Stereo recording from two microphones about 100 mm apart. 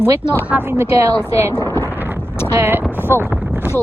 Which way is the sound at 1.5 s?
30° left (ahead or behind).